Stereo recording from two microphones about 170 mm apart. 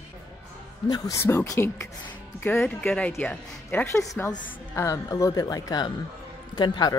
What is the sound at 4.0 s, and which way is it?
A woman's voice, 20° left (ahead or behind).